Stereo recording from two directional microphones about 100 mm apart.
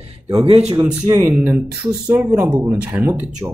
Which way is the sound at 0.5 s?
90° right.